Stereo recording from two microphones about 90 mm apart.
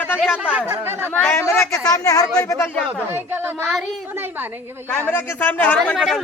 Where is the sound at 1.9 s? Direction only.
40° left (ahead or behind).